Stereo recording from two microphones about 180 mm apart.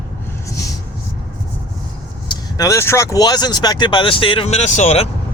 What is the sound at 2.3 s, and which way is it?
Speech, 20° left (ahead or behind).